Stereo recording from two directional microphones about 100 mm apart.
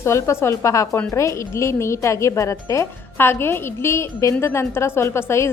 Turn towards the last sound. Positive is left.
turn(degrees=25)  # may be behind; listen again after turning